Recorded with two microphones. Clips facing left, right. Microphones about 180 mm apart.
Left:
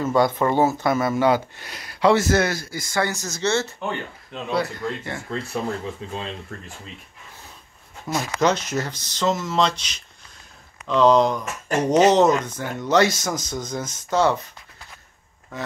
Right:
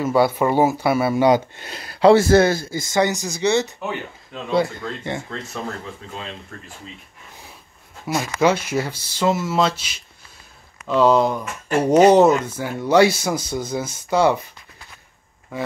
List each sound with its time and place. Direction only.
0.0 s speech: 5° right (ahead or behind)
3.8 s speech: 5° right (ahead or behind)
4.6 s speech: 25° right (ahead or behind)
8.1 s speech: 10° right (ahead or behind)
15.5 s speech: 10° right (ahead or behind)